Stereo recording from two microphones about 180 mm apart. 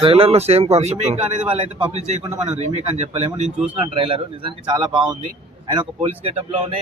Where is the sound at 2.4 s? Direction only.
40° right (ahead or behind).